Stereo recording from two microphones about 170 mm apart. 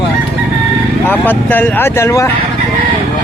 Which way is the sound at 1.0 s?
10° left (ahead or behind).